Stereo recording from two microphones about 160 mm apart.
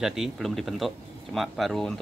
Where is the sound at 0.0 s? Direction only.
Centre (ahead or behind).